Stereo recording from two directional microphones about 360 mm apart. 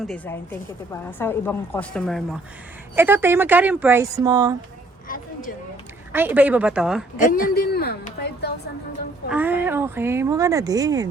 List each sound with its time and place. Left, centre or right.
0.0 s speech: centre
5.0 s a sound: left
6.1 s speech: centre
7.2 s a woman's voice: left
9.3 s speech: centre